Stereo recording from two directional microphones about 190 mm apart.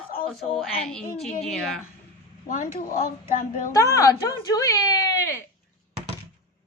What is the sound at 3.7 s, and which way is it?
Speech, 15° left (ahead or behind).